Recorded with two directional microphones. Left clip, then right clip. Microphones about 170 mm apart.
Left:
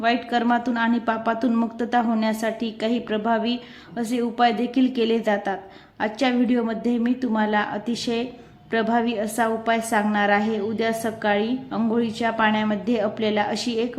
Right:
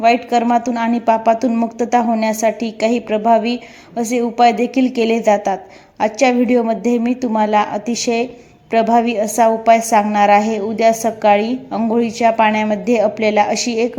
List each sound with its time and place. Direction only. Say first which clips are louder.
0.0 s a woman's voice: right 8 dB; 15° right (ahead or behind)